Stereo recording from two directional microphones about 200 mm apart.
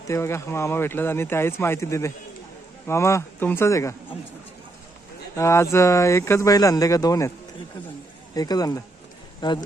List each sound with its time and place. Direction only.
0.1 s speech: 15° left (ahead or behind)
5.4 s speech: 15° left (ahead or behind)
8.4 s speech: 20° left (ahead or behind)